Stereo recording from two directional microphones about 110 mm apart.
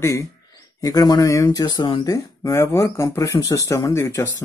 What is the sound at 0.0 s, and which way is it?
A man's voice, 30° left (ahead or behind).